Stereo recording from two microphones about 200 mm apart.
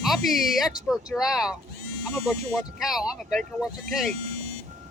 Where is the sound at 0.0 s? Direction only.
Centre (ahead or behind).